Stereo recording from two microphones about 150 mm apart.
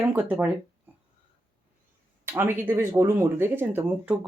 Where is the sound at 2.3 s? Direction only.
15° right (ahead or behind).